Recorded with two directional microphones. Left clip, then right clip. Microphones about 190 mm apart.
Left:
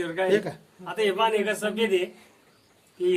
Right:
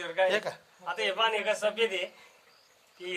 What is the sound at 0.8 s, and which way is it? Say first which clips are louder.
A man's voice: left 4 dB; 25° left (ahead or behind).